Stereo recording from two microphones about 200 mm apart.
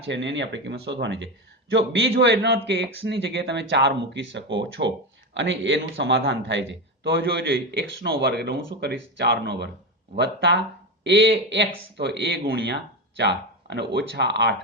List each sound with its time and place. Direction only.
0.1 s a man's voice: 65° right (ahead or behind)